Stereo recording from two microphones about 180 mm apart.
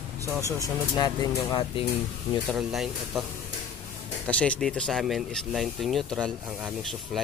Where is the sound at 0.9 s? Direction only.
20° left (ahead or behind).